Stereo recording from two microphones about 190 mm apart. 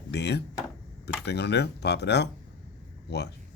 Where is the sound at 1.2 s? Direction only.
60° left (ahead or behind).